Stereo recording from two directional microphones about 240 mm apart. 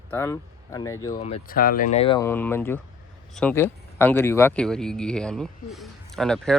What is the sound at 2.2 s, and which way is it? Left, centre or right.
A man's voice, centre.